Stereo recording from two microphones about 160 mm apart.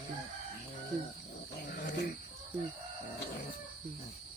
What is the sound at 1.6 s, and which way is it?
Dog, 75° left (ahead or behind).